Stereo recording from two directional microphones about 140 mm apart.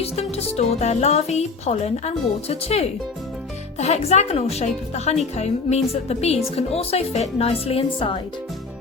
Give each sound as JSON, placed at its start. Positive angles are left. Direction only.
{"t": 0.0, "sound": "a woman's voice", "side_deg": 45}